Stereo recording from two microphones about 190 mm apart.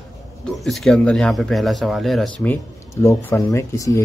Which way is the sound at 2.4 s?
10° left (ahead or behind).